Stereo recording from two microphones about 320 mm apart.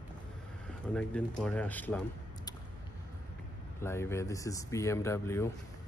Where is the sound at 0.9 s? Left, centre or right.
Centre.